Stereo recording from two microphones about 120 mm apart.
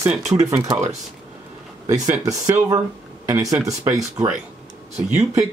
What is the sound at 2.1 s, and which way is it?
Speech, 30° right (ahead or behind).